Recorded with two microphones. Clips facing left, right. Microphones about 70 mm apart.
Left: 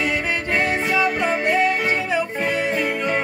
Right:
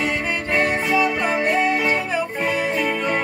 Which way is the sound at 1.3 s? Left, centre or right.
Centre.